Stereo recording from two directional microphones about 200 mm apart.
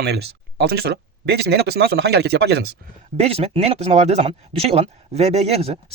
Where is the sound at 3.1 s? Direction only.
30° right (ahead or behind).